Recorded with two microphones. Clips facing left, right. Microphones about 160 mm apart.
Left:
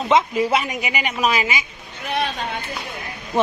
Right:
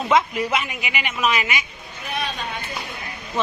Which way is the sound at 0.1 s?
25° left (ahead or behind).